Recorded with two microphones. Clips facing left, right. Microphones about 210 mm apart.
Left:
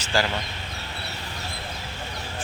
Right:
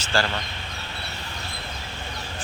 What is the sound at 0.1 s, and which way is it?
Speech, 15° left (ahead or behind).